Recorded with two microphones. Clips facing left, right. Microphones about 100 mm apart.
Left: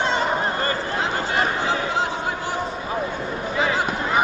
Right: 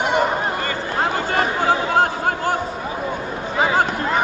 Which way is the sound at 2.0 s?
50° right (ahead or behind).